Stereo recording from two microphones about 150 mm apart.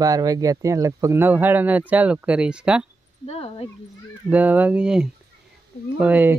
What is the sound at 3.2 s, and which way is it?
Speech, 40° left (ahead or behind).